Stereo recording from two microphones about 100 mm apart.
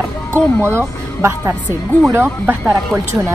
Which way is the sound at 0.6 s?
25° right (ahead or behind).